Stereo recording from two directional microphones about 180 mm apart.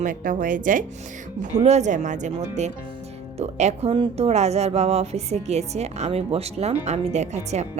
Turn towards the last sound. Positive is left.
turn(degrees=-40)  # may be behind; listen again after turning